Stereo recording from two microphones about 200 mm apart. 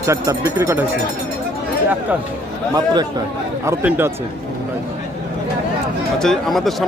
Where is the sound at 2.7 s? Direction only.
20° right (ahead or behind).